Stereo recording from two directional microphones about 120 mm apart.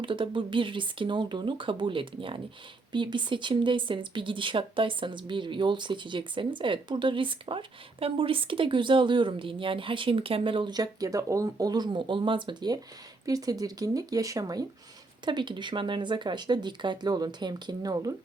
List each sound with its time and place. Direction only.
0.0 s speech: 45° right (ahead or behind)